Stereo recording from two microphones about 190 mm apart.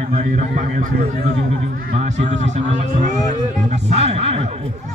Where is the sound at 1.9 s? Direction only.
35° right (ahead or behind).